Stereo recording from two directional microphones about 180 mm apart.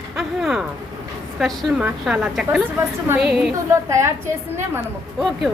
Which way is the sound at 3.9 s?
15° right (ahead or behind).